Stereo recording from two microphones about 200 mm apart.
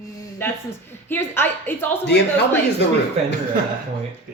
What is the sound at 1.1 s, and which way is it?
Speech, 10° left (ahead or behind).